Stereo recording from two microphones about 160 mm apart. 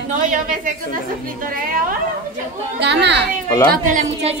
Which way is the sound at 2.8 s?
90° right.